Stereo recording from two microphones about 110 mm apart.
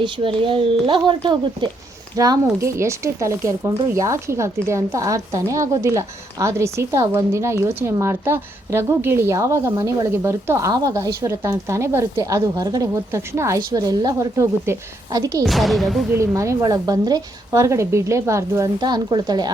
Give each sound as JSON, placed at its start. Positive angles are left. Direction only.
{"t": 0.0, "sound": "speech", "side_deg": -50}
{"t": 2.1, "sound": "a woman's voice", "side_deg": -35}
{"t": 13.6, "sound": "a woman's voice", "side_deg": -35}
{"t": 15.4, "sound": "speech", "side_deg": 0}
{"t": 16.1, "sound": "a woman's voice", "side_deg": -25}
{"t": 18.8, "sound": "a woman's voice", "side_deg": -40}